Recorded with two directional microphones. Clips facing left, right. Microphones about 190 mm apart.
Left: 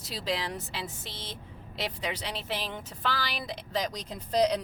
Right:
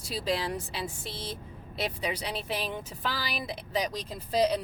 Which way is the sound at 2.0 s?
10° right (ahead or behind).